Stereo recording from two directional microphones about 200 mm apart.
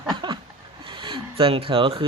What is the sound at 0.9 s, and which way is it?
Speech, 25° right (ahead or behind).